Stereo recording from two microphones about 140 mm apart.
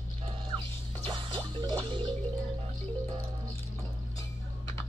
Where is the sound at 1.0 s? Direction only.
35° right (ahead or behind).